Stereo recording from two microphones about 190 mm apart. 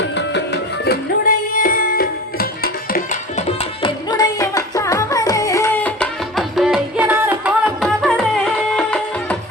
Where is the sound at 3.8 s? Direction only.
20° left (ahead or behind).